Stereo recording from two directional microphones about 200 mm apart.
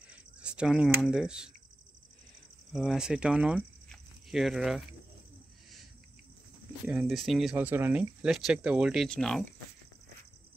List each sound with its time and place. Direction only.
0.1 s speech: 5° right (ahead or behind)
2.7 s speech: centre (ahead or behind)
6.9 s speech: centre (ahead or behind)